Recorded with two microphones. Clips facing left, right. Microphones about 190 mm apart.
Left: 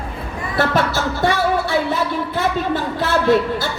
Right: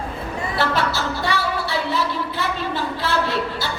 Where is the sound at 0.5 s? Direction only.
50° left (ahead or behind).